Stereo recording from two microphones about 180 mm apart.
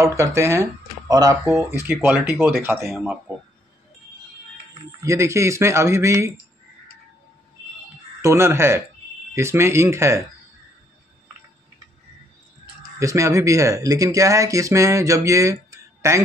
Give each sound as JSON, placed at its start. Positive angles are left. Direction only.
{"t": 0.0, "sound": "speech", "side_deg": -15}
{"t": 2.9, "sound": "speech", "side_deg": 0}
{"t": 5.0, "sound": "speech", "side_deg": -15}
{"t": 8.2, "sound": "speech", "side_deg": -15}
{"t": 13.0, "sound": "speech", "side_deg": -15}